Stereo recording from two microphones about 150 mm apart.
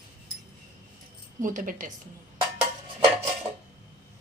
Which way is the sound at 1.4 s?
60° right (ahead or behind).